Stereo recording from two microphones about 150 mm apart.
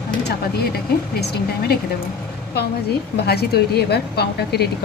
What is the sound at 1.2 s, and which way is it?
Speech, 90° left.